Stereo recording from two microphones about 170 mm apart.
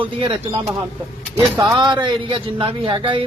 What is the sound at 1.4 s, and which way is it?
Speech, 15° right (ahead or behind).